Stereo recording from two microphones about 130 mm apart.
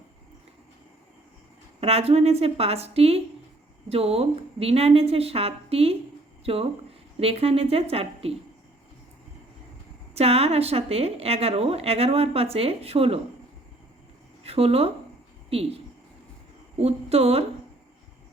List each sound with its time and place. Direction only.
1.8 s a woman's voice: 50° right (ahead or behind)
10.2 s a woman's voice: 50° right (ahead or behind)
14.4 s a woman's voice: 50° right (ahead or behind)